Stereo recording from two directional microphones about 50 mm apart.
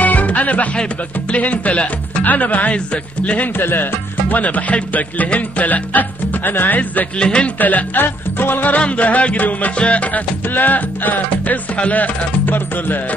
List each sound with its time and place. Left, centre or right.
0.0 s music: left
1.3 s speech: left
3.5 s music: left
7.2 s speech: centre
7.5 s music: left
9.8 s speech: left
10.5 s music: left